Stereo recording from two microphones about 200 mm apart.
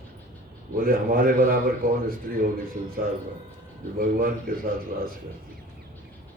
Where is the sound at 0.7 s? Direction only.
45° right (ahead or behind).